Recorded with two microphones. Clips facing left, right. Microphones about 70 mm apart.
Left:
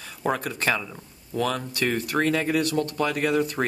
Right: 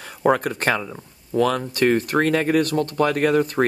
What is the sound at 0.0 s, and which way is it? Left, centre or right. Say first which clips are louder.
Speech: right 8 dB; right.